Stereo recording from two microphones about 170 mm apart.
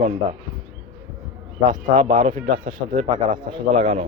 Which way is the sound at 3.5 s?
35° right (ahead or behind).